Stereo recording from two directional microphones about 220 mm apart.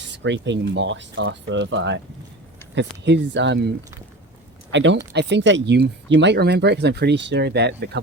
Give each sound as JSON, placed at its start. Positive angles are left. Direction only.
{"t": 0.2, "sound": "speech", "side_deg": -55}